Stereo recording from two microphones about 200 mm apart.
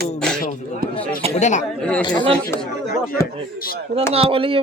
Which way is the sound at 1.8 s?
5° left (ahead or behind).